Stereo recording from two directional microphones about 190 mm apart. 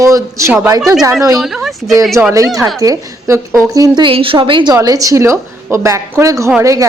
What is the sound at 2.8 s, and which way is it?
A woman's voice, 20° right (ahead or behind).